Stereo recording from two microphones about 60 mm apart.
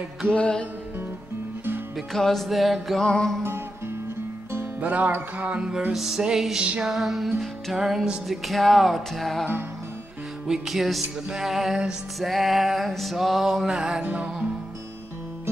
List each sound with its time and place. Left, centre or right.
0.3 s music: centre
2.0 s music: centre
4.7 s music: right
5.9 s music: centre